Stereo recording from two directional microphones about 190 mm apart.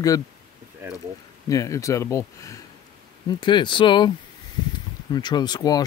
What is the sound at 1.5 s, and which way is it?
Speech, 15° left (ahead or behind).